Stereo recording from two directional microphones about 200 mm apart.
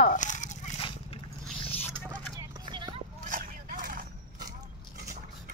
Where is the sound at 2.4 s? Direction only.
20° right (ahead or behind).